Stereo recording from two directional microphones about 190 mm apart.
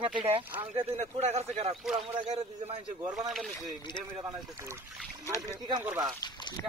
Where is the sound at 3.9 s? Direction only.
25° left (ahead or behind).